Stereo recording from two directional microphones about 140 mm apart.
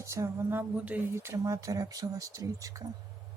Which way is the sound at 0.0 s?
20° right (ahead or behind).